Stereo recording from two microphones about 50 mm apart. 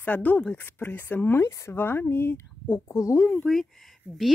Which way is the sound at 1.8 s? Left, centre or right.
Left.